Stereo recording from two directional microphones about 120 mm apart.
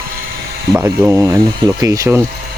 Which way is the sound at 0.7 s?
25° right (ahead or behind).